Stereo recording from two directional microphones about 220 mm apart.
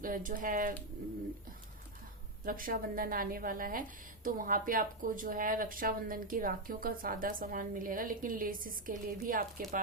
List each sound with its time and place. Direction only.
0.0 s a woman's voice: 40° right (ahead or behind)
2.4 s a woman's voice: 40° right (ahead or behind)